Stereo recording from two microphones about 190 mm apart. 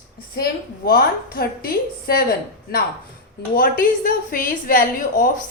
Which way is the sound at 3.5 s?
50° left (ahead or behind).